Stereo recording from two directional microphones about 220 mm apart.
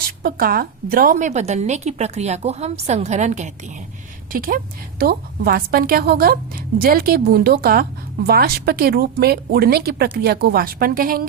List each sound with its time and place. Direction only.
0.2 s a woman's voice: 40° right (ahead or behind)